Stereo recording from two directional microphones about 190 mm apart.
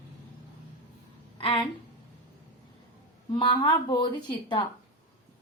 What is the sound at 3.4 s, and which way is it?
Speech, 25° left (ahead or behind).